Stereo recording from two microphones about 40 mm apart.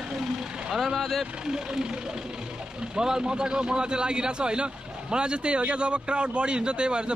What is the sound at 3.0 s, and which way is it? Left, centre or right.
A man's voice, centre.